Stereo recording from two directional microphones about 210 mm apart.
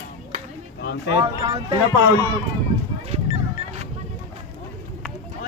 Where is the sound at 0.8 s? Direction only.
55° left (ahead or behind).